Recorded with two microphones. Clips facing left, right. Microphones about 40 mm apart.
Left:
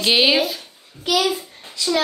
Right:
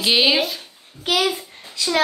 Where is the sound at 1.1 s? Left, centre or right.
Right.